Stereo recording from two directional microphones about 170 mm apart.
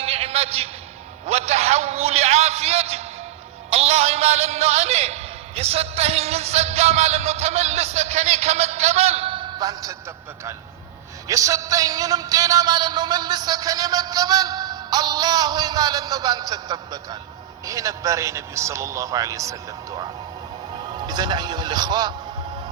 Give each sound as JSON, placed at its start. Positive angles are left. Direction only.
{"t": 0.0, "sound": "a sound", "side_deg": -35}
{"t": 3.7, "sound": "a man's voice", "side_deg": -40}
{"t": 11.3, "sound": "a man's voice", "side_deg": -20}